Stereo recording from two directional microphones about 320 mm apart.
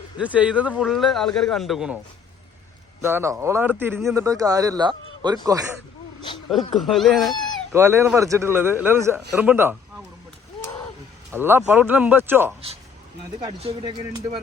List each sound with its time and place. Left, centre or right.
0.2 s a man's voice: centre
3.0 s speech: centre
6.7 s a man's voice: centre
11.3 s speech: centre
13.6 s speech: centre